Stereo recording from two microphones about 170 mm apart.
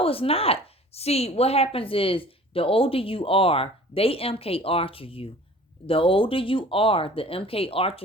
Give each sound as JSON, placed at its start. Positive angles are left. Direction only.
{"t": 0.0, "sound": "a woman's voice", "side_deg": 35}